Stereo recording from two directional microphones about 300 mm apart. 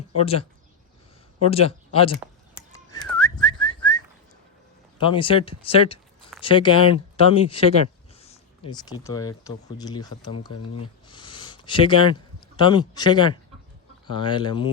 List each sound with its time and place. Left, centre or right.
0.2 s speech: centre
2.6 s whistling: centre
4.9 s speech: centre
11.1 s a sound: centre
12.5 s speech: centre